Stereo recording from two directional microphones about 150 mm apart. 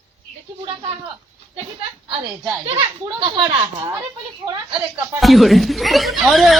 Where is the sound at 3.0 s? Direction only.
35° right (ahead or behind).